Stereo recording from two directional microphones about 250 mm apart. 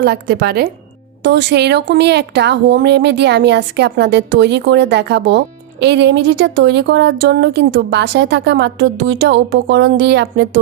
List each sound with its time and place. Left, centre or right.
0.0 s a woman's voice: right